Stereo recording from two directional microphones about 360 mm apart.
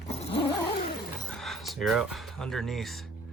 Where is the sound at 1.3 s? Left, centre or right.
Centre.